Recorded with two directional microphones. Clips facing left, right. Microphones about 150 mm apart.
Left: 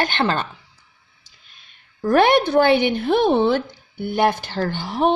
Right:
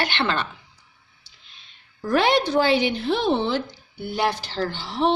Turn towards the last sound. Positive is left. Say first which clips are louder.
# left 3 dB
turn(degrees=50)  # may be behind; listen again after turning